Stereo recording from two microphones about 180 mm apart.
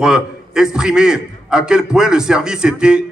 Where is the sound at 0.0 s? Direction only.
5° right (ahead or behind).